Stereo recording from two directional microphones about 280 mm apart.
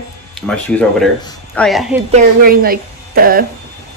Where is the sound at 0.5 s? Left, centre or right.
Centre.